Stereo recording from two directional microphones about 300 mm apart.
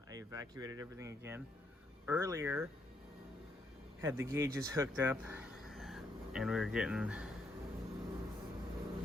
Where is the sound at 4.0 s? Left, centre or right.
Centre.